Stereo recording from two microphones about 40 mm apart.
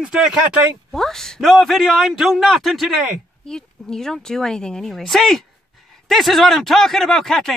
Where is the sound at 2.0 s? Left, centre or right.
Centre.